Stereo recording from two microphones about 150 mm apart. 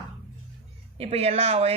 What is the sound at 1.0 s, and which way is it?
Speech, 45° right (ahead or behind).